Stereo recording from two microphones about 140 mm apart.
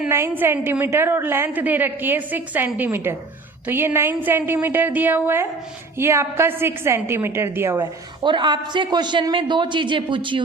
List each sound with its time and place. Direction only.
0.1 s a woman's voice: 15° right (ahead or behind)
7.8 s a man's voice: 35° right (ahead or behind)